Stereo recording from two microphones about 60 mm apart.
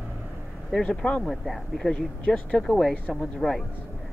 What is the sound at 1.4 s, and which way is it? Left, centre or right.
Speech, centre.